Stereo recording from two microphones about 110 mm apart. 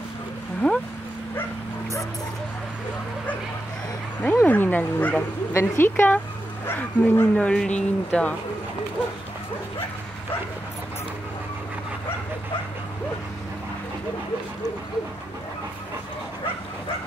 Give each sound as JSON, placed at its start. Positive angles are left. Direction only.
{"t": 0.6, "sound": "a sound", "side_deg": 10}
{"t": 4.2, "sound": "speech", "side_deg": 15}
{"t": 7.3, "sound": "speech", "side_deg": 10}